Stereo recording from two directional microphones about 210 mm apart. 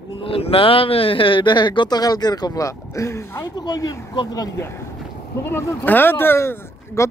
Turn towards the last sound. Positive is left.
turn(degrees=10)  # may be behind; listen again after turning